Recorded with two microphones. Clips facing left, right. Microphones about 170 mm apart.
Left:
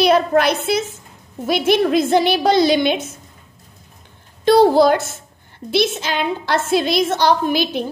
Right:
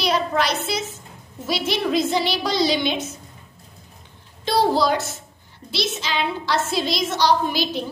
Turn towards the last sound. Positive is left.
turn(degrees=55)  # may be behind; listen again after turning